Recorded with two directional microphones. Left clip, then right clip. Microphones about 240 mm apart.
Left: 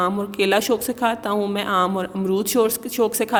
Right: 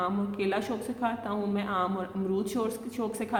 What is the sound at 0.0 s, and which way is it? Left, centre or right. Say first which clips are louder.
A woman's voice: left 10 dB; left.